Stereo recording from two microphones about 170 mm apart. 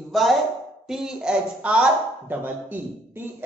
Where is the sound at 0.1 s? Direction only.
Centre (ahead or behind).